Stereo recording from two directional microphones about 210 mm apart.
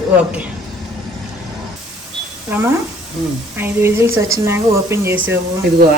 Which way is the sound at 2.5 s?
10° right (ahead or behind).